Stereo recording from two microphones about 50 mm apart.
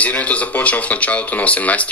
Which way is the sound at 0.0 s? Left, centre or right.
Left.